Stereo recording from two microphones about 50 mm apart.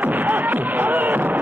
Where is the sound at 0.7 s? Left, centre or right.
Right.